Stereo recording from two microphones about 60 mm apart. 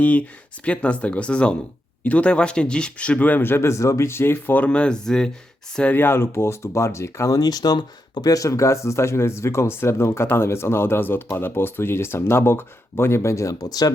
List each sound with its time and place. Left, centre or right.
0.0 s speech: left
4.7 s speech: centre
5.9 s speech: left
7.3 s speech: left